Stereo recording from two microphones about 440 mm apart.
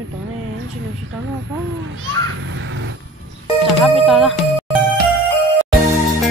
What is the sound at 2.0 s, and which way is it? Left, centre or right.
Speech, right.